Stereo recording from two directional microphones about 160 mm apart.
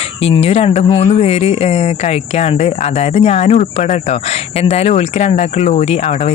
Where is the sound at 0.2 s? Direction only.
40° left (ahead or behind).